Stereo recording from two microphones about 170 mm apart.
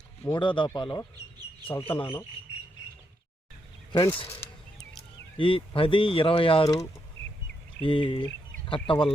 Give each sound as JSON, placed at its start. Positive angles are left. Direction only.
{"t": 0.3, "sound": "speech", "side_deg": 30}
{"t": 3.9, "sound": "speech", "side_deg": 20}
{"t": 4.3, "sound": "a sound", "side_deg": 15}
{"t": 5.4, "sound": "speech", "side_deg": 30}
{"t": 7.8, "sound": "speech", "side_deg": 30}